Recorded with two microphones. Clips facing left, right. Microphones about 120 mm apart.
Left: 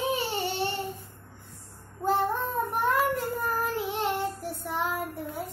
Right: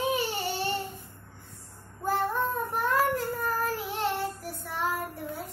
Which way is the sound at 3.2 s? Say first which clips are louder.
Left 1 dB; 15° left (ahead or behind).